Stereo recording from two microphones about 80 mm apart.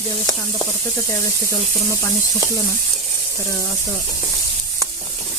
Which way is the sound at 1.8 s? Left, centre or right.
Left.